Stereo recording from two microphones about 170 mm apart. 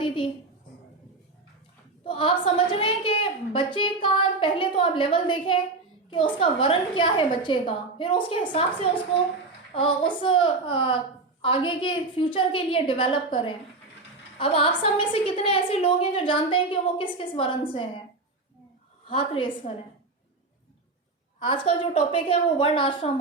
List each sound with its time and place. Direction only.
0.0 s a sound: 30° left (ahead or behind)
2.0 s a woman's voice: 30° left (ahead or behind)
19.0 s a woman's voice: 30° left (ahead or behind)
21.4 s a woman's voice: 30° left (ahead or behind)